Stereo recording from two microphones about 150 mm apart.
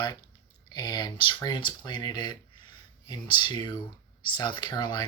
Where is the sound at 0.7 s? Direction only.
30° left (ahead or behind).